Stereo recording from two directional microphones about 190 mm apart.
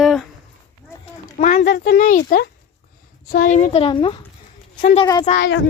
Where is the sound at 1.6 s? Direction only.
60° left (ahead or behind).